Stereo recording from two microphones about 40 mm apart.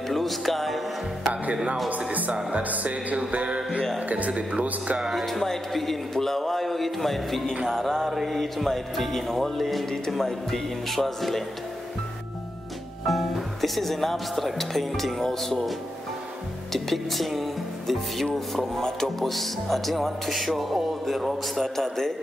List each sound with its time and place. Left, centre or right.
0.1 s music: centre
1.3 s music: right
5.0 s speech: centre
7.7 s music: centre
8.1 s speech: centre
13.0 s speech: centre
16.7 s speech: centre
18.8 s speech: centre
21.8 s music: centre